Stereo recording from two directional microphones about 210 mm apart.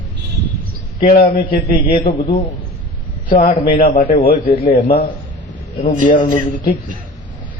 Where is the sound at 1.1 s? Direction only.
45° left (ahead or behind).